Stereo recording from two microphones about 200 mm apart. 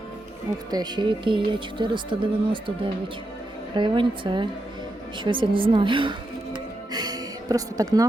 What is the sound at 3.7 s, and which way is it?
Speech, 25° right (ahead or behind).